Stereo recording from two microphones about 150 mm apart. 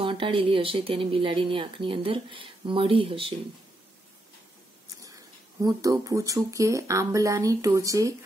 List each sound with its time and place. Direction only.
0.0 s speech: 35° right (ahead or behind)
5.6 s speech: 25° right (ahead or behind)